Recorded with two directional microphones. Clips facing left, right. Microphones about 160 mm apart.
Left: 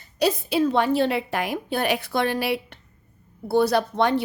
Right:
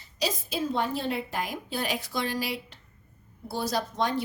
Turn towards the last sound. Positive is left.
turn(degrees=65)  # may be behind; listen again after turning